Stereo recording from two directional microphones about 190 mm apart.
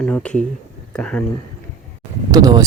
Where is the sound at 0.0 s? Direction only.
5° left (ahead or behind).